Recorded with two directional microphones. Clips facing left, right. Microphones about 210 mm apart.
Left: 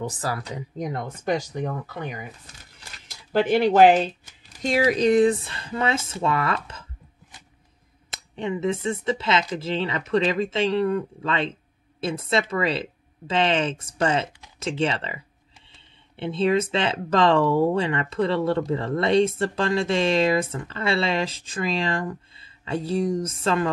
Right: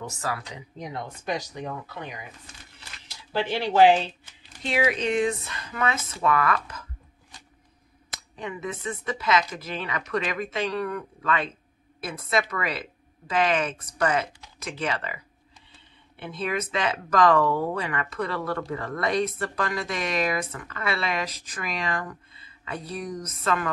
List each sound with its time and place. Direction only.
0.0 s speech: 35° left (ahead or behind)
8.4 s speech: 25° left (ahead or behind)